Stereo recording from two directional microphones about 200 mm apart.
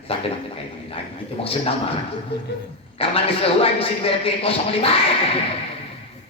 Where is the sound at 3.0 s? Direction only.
30° left (ahead or behind).